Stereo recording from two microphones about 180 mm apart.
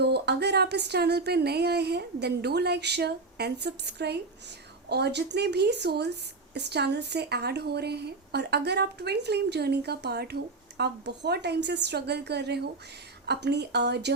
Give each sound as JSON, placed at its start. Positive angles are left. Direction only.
{"t": 0.0, "sound": "speech", "side_deg": -65}